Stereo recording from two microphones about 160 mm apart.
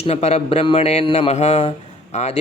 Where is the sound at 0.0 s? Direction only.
40° left (ahead or behind).